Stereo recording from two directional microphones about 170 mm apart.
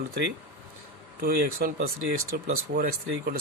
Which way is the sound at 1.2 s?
60° right (ahead or behind).